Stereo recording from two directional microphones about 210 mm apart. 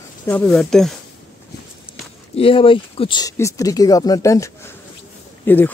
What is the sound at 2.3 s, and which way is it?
Speech, 25° left (ahead or behind).